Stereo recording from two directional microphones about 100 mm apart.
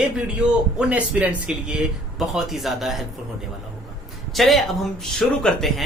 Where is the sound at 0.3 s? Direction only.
15° right (ahead or behind).